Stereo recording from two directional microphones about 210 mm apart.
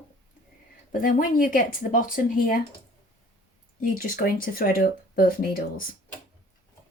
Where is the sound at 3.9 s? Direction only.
45° left (ahead or behind).